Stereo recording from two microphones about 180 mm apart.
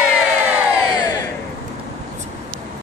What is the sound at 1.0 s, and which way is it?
Crowd, 20° left (ahead or behind).